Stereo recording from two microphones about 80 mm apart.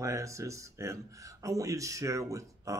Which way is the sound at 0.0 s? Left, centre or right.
Right.